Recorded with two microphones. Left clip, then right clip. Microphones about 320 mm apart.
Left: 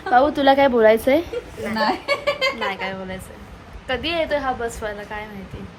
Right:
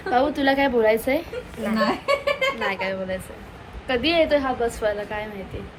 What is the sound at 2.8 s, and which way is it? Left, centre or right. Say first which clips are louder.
A woman's voice: right 2 dB; centre.